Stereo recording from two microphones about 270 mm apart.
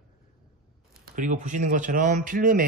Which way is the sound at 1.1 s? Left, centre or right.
Right.